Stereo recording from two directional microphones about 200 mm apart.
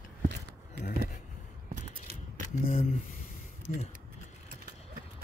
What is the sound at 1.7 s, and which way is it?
Scissors, 40° right (ahead or behind).